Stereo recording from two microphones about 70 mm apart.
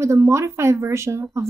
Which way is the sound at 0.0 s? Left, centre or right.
Right.